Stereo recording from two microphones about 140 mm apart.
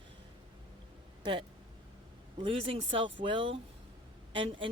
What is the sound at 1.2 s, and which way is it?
Speech, 35° right (ahead or behind).